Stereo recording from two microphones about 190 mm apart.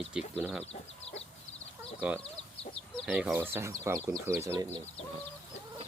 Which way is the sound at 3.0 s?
Centre (ahead or behind).